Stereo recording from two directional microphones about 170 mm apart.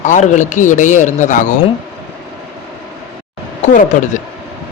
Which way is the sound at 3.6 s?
45° left (ahead or behind).